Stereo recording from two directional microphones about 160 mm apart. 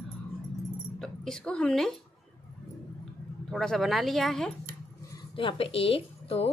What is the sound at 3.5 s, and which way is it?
A woman's voice, centre (ahead or behind).